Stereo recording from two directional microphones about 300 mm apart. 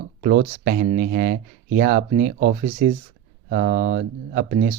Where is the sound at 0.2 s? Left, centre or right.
Right.